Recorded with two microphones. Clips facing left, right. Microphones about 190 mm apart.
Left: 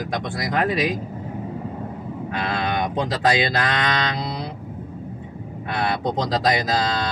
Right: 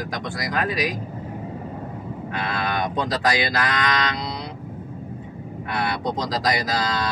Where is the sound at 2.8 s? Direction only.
30° left (ahead or behind).